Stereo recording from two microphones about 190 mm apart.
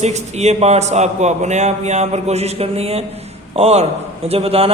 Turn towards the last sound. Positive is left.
turn(degrees=-30)  # may be behind; listen again after turning